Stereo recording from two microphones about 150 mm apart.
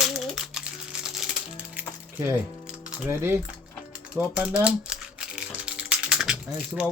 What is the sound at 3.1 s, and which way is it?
Speech, 15° right (ahead or behind).